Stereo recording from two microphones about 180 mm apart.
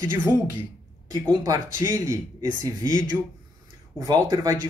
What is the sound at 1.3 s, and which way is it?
Speech, 20° right (ahead or behind).